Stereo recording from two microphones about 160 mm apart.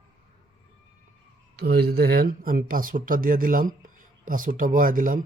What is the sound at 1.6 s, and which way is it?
Speech, 80° right.